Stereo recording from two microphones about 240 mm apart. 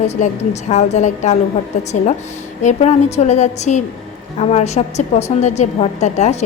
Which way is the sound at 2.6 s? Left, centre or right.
Left.